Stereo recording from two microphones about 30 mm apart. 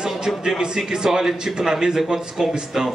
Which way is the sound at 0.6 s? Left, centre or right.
Right.